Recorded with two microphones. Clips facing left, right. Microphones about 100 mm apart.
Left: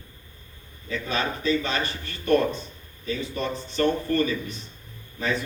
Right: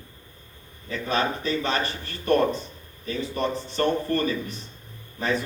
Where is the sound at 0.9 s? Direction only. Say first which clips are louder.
Right 2 dB; 35° right (ahead or behind).